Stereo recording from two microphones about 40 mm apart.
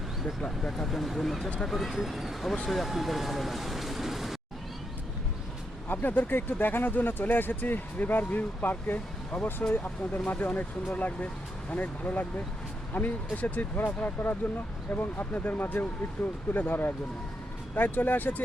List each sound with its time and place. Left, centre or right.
0.4 s speech: centre
0.9 s speech: centre
1.8 s speech: centre
5.9 s speech: left
13.7 s speech: left